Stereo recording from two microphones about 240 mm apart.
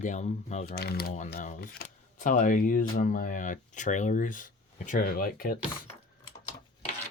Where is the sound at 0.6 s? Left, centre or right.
Left.